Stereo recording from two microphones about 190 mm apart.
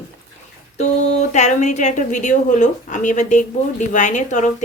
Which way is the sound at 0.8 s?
35° left (ahead or behind).